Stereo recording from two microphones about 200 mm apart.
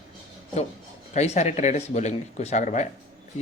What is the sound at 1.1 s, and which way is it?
Speech, 35° left (ahead or behind).